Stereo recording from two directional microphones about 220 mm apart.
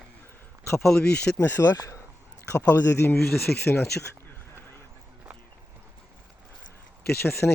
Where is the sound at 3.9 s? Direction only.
50° left (ahead or behind).